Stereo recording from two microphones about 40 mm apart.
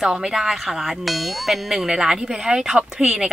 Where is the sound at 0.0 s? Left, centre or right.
Centre.